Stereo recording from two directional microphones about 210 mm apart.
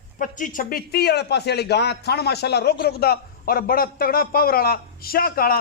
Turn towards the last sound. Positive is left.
turn(degrees=45)  # may be behind; listen again after turning